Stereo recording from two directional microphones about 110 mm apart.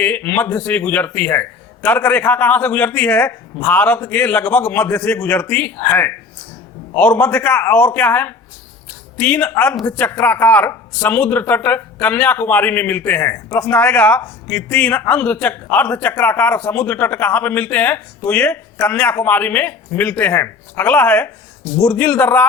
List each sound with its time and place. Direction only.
0.0 s a man's voice: 15° left (ahead or behind)
14.2 s a man's voice: 20° left (ahead or behind)